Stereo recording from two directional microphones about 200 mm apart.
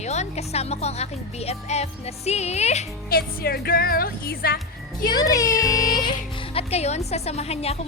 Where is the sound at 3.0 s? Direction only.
50° left (ahead or behind).